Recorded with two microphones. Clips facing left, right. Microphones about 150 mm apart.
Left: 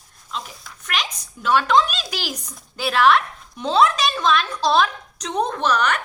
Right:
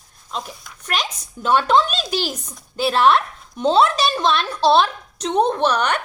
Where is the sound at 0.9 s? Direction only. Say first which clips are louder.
Right 3 dB; 35° right (ahead or behind).